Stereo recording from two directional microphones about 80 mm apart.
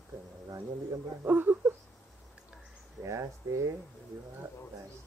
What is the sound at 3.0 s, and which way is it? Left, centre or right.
Speech, right.